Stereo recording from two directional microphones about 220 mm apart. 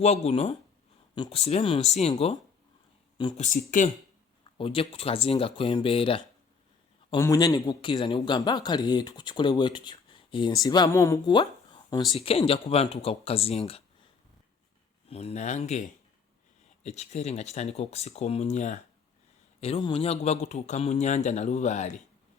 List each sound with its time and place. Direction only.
0.0 s speech: 30° left (ahead or behind)
3.7 s a man's voice: 35° left (ahead or behind)
4.5 s speech: 25° left (ahead or behind)
15.0 s speech: 25° left (ahead or behind)
16.8 s a man's voice: 30° left (ahead or behind)